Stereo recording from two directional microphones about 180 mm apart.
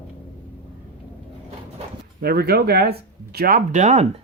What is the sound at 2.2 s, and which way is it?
Speech, 60° right (ahead or behind).